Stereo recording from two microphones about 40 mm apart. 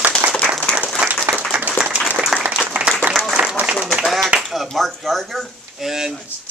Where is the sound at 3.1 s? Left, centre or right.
Right.